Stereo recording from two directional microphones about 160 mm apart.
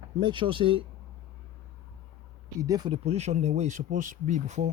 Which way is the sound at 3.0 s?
40° right (ahead or behind).